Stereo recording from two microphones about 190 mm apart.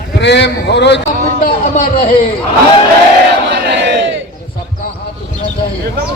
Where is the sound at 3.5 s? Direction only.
65° right (ahead or behind).